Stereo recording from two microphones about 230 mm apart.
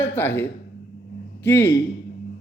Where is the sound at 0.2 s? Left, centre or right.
Centre.